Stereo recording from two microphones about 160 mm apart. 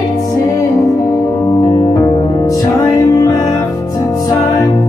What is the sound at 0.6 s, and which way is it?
Music, 20° left (ahead or behind).